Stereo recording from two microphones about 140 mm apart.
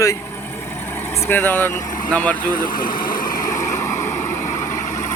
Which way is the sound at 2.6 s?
80° left.